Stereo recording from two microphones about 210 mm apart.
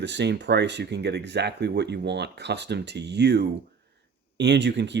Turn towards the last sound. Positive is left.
turn(degrees=-55)  # may be behind; listen again after turning